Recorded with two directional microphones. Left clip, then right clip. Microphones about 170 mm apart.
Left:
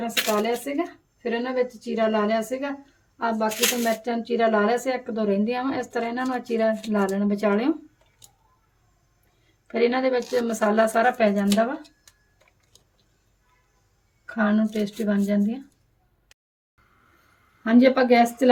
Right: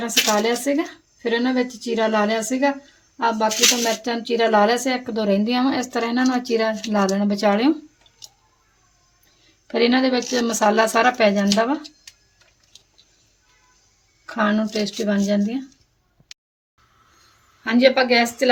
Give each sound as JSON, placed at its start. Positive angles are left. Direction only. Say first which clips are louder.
{"t": 0.0, "sound": "a woman's voice", "louder": "right 5 dB", "side_deg": -35}
{"t": 9.6, "sound": "a woman's voice", "louder": "right 3 dB", "side_deg": -30}
{"t": 14.3, "sound": "a woman's voice", "louder": "right 3 dB", "side_deg": -25}
{"t": 17.6, "sound": "speech", "louder": "right 2 dB", "side_deg": 60}